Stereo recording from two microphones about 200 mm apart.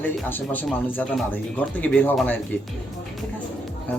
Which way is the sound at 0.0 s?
10° left (ahead or behind).